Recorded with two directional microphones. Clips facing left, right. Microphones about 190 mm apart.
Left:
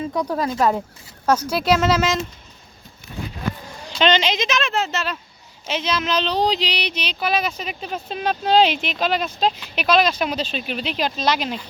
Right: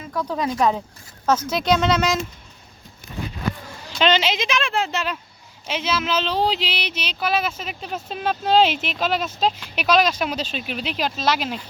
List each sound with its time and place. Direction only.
0.1 s speech: 15° left (ahead or behind); by 2.2 s centre (ahead or behind)
3.9 s speech: 5° right (ahead or behind)